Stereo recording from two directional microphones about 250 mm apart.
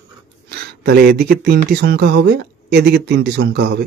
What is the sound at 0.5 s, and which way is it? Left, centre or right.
Speech, right.